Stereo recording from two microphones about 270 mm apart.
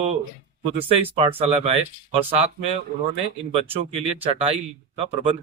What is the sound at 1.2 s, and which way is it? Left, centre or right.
Speech, centre.